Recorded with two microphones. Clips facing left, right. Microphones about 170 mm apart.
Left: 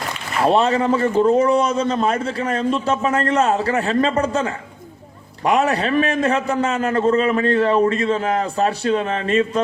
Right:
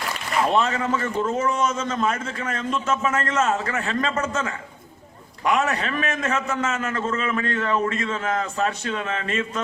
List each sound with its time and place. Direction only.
0.4 s a man's voice: 35° left (ahead or behind)